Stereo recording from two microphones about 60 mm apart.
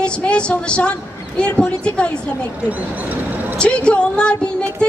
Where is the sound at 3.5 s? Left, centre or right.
Centre.